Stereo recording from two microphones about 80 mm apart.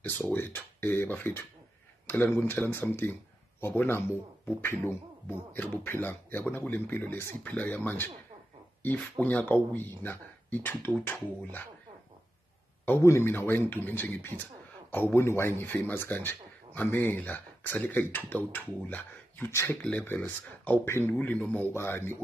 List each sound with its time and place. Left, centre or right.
0.3 s speech: left
9.2 s speech: left
12.8 s speech: left
20.8 s speech: left